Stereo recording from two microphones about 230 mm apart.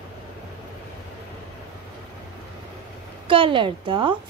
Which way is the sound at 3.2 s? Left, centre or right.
Right.